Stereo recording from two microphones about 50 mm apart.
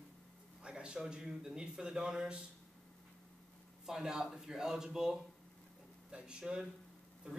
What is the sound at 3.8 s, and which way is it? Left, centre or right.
A man's voice, centre.